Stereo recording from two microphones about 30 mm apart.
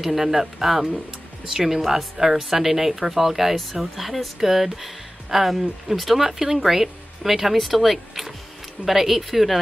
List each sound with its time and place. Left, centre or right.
0.0 s speech: centre